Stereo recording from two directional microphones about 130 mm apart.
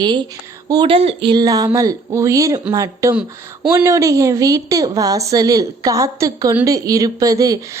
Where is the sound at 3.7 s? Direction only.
25° right (ahead or behind).